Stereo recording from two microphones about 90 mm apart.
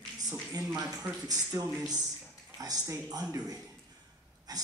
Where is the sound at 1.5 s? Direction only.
35° right (ahead or behind).